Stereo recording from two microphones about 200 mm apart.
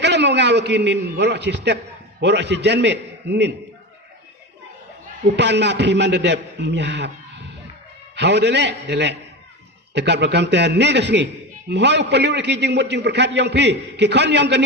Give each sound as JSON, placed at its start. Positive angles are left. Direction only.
{"t": 0.0, "sound": "a man's voice", "side_deg": -60}
{"t": 5.4, "sound": "a man's voice", "side_deg": -60}
{"t": 8.1, "sound": "a man's voice", "side_deg": -60}